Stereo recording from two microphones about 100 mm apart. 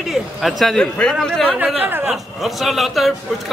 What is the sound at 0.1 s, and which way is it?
A man's voice, centre (ahead or behind).